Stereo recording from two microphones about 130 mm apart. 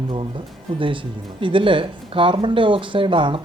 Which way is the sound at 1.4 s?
40° right (ahead or behind).